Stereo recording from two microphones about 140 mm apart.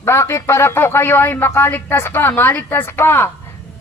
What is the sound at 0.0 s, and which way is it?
A man's voice, 20° left (ahead or behind).